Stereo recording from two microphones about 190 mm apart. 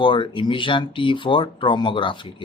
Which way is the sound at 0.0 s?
25° left (ahead or behind).